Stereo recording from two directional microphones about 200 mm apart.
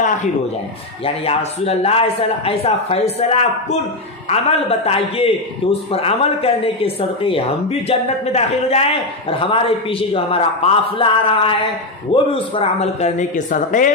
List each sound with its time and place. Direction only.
1.0 s a man's voice: 30° left (ahead or behind)